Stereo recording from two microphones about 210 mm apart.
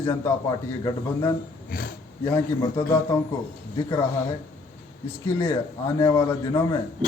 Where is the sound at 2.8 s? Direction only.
10° left (ahead or behind).